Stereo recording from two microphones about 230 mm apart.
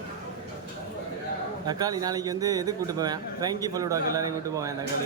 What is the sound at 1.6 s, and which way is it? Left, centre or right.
A man's voice, centre.